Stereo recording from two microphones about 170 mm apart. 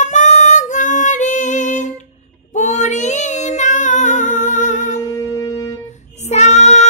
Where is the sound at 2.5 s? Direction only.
45° left (ahead or behind).